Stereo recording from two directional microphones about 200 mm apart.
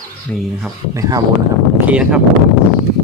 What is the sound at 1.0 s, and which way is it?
Speech, 15° right (ahead or behind).